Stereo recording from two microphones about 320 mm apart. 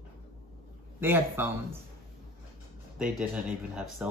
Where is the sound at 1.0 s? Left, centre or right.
Centre.